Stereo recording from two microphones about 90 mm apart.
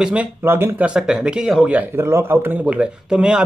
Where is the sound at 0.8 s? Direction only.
10° right (ahead or behind).